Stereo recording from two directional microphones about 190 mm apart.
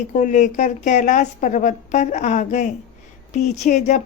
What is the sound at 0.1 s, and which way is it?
A woman's voice, 40° left (ahead or behind).